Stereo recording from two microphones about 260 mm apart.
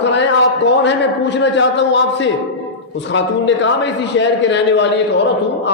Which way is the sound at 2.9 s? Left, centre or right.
Left.